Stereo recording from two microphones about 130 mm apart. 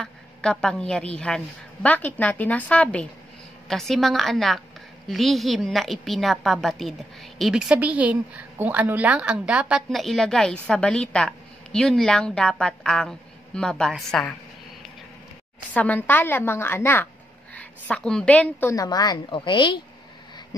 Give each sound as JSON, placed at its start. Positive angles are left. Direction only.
{"t": 0.0, "sound": "a woman's voice", "side_deg": 5}
{"t": 15.7, "sound": "a woman's voice", "side_deg": 10}
{"t": 18.7, "sound": "a woman's voice", "side_deg": 30}